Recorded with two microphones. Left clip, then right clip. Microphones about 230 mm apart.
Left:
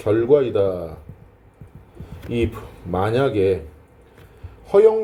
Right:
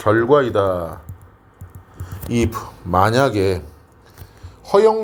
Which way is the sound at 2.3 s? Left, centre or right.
Right.